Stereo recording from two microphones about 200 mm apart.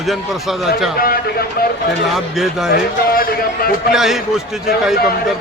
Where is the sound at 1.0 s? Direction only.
45° left (ahead or behind).